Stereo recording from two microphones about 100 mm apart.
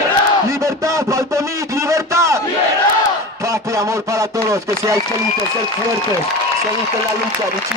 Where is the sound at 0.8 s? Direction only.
30° right (ahead or behind).